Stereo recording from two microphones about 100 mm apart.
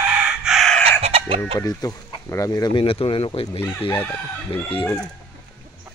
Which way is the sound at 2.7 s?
65° left (ahead or behind).